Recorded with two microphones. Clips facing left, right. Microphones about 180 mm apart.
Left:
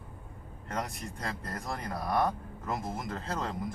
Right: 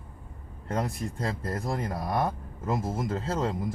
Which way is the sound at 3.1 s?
25° right (ahead or behind).